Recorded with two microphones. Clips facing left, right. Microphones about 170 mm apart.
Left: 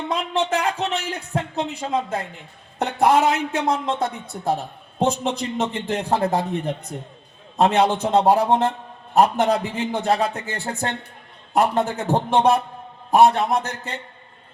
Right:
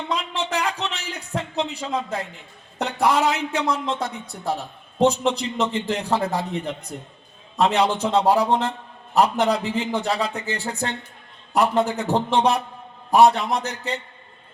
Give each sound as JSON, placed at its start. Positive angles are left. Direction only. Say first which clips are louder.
{"t": 0.1, "sound": "a man's voice", "louder": "left 4 dB", "side_deg": 55}
{"t": 4.9, "sound": "a man's voice", "louder": "right 2 dB", "side_deg": 50}